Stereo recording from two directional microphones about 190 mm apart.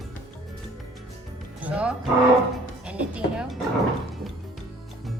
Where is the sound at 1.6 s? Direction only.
5° right (ahead or behind).